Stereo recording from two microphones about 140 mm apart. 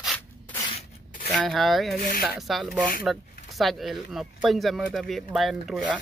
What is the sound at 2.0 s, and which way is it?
Speech, 90° left.